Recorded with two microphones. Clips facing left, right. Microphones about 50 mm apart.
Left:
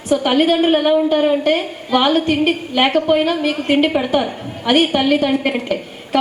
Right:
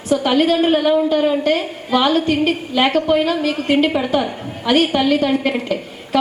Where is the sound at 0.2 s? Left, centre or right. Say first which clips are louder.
Even; centre.